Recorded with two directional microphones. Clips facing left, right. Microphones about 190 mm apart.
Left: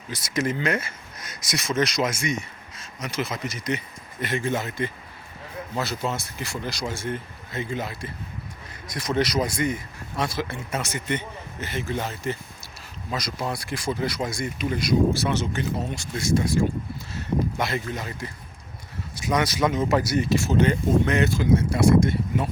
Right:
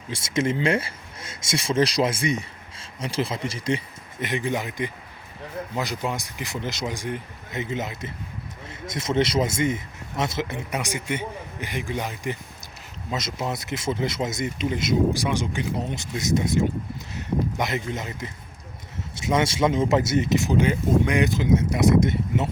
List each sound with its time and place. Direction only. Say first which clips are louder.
0.1 s speech: right 2 dB; 25° right (ahead or behind)
4.3 s a man's voice: even; 15° right (ahead or behind)